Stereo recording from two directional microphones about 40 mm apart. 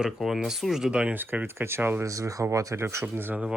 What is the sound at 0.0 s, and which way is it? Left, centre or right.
Speech, centre.